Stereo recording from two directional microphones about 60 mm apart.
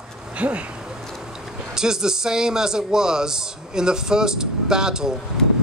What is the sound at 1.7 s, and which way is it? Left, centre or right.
A man's voice, centre.